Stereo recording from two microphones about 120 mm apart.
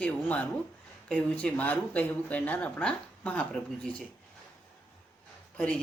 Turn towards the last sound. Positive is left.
turn(degrees=5)  # may be behind; listen again after turning